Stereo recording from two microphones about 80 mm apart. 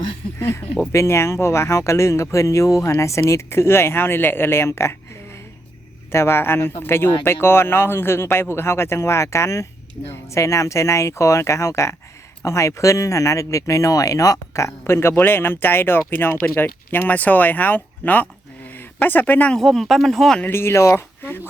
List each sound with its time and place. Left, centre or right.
0.3 s speech: left
19.5 s speech: centre
20.4 s speech: left